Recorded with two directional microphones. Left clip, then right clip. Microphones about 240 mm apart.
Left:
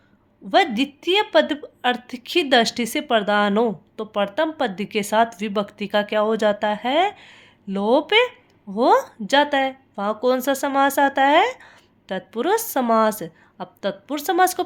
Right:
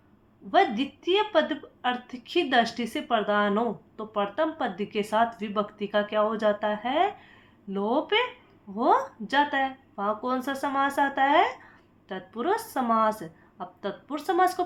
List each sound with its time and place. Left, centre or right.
0.5 s a woman's voice: left